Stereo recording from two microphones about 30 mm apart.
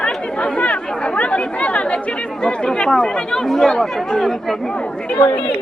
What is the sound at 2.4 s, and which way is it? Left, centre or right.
Speech, left.